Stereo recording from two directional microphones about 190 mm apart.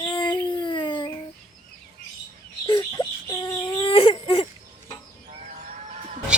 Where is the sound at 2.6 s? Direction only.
25° left (ahead or behind).